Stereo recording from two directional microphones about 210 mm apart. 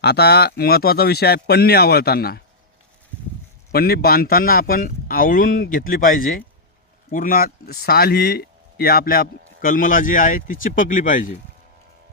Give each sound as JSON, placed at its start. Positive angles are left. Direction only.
{"t": 0.0, "sound": "a man's voice", "side_deg": 50}
{"t": 3.7, "sound": "a man's voice", "side_deg": 45}